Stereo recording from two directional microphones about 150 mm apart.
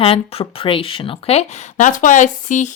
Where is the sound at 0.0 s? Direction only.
40° left (ahead or behind).